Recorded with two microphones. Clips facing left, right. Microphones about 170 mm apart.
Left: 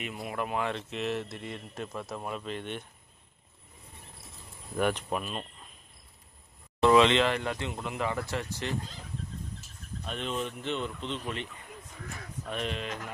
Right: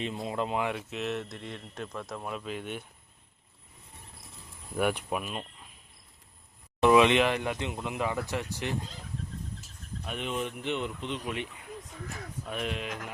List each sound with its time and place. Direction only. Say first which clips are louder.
0.0 s speech: right 3 dB; 25° right (ahead or behind); by 2.8 s 5° right (ahead or behind)
4.8 s speech: even; 10° right (ahead or behind)
6.8 s speech: right 1 dB; 15° right (ahead or behind)
10.1 s speech: even; 10° right (ahead or behind)
12.5 s speech: even; 5° right (ahead or behind)